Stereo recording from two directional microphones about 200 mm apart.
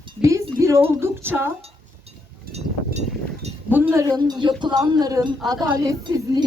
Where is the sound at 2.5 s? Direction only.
35° right (ahead or behind).